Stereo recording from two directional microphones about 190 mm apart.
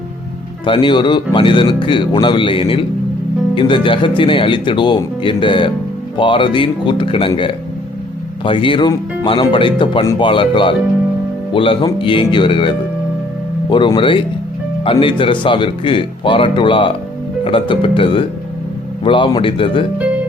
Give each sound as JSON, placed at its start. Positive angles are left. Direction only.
{"t": 0.6, "sound": "speech", "side_deg": 25}